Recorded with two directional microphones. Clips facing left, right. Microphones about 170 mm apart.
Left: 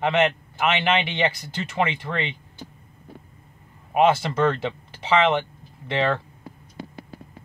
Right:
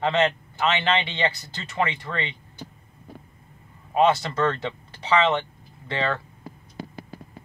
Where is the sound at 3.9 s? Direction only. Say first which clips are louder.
Left 1 dB; 20° left (ahead or behind).